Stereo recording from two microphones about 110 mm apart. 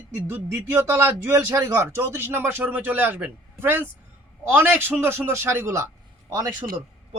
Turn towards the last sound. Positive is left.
turn(degrees=-30)  # may be behind; listen again after turning